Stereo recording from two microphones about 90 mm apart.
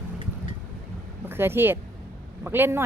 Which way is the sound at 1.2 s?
25° right (ahead or behind).